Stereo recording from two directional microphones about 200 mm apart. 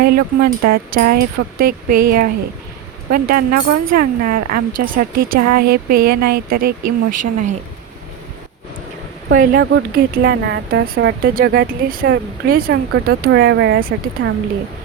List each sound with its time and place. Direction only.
0.0 s speech: 50° right (ahead or behind)
9.3 s speech: 45° right (ahead or behind); by 13.7 s 60° right (ahead or behind)
14.2 s speech: 45° right (ahead or behind)